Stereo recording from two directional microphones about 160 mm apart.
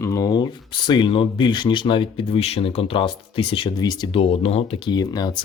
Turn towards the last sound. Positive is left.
turn(degrees=25)  # may be behind; listen again after turning